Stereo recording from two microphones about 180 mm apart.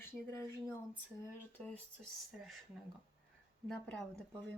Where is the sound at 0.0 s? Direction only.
15° left (ahead or behind).